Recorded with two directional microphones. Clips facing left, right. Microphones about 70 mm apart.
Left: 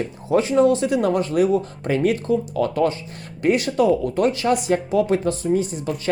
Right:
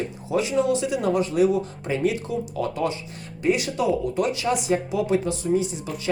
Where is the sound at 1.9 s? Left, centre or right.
Left.